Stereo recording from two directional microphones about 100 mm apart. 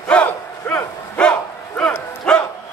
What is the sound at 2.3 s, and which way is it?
Bow-wow, 10° left (ahead or behind).